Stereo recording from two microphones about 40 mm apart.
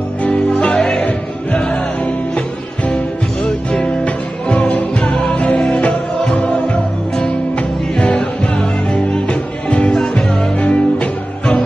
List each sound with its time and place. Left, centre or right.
0.2 s music: left
0.7 s music: centre
3.4 s music: left